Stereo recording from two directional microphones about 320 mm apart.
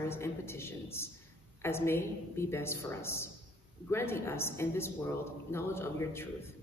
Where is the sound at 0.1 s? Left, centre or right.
Centre.